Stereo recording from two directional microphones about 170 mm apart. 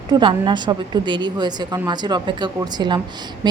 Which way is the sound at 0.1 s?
30° right (ahead or behind).